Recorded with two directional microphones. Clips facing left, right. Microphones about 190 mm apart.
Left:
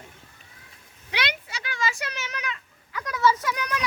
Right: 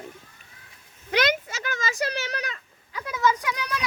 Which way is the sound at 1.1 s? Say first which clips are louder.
Right 8 dB; 45° right (ahead or behind).